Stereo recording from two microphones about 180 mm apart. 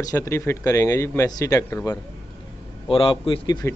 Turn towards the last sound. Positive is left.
turn(degrees=25)  # may be behind; listen again after turning